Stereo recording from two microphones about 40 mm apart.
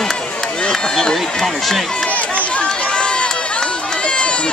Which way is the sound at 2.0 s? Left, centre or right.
Left.